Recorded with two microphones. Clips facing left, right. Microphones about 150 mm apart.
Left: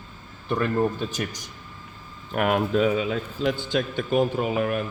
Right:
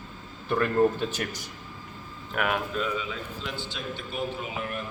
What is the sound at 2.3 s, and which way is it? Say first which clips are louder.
A man's voice: left 6 dB; 45° left (ahead or behind).